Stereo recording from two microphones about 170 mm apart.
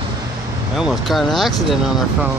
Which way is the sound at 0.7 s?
Centre (ahead or behind).